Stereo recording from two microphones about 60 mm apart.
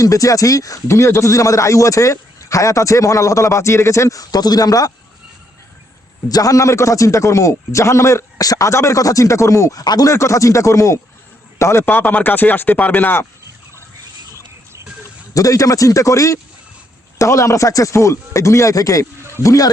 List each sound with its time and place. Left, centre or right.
0.0 s a man's voice: left
0.9 s speech: left
6.2 s speech: left
8.4 s speech: left
10.2 s a man's voice: left
11.9 s speech: left
15.3 s a man's voice: left